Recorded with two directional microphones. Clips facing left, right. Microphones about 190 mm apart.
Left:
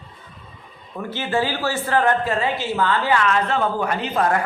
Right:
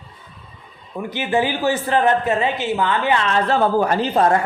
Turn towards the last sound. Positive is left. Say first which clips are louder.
# right 4 dB
turn(degrees=-30)  # may be behind; listen again after turning